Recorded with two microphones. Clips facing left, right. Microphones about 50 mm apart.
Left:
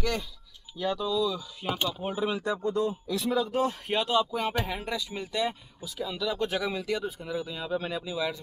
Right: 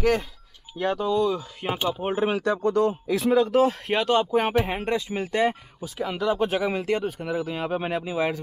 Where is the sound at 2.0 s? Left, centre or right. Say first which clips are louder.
Right 6 dB; right.